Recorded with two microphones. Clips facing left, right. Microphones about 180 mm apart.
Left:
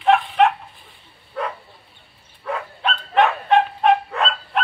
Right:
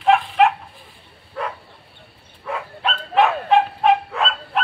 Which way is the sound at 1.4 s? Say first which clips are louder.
Left 1 dB; centre (ahead or behind).